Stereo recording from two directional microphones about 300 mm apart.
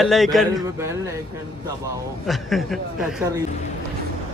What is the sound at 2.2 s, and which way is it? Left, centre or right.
Speech, centre.